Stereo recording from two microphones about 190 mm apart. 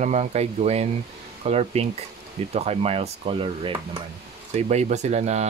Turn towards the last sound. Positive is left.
turn(degrees=-35)  # may be behind; listen again after turning